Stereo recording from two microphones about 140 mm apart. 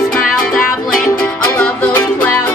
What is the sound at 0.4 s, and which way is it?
Music, 5° left (ahead or behind).